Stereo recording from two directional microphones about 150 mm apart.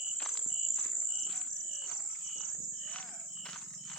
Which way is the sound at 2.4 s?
5° left (ahead or behind).